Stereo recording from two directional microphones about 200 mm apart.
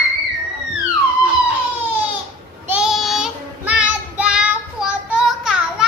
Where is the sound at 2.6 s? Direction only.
5° right (ahead or behind).